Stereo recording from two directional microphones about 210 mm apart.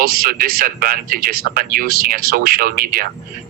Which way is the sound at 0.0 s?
45° right (ahead or behind).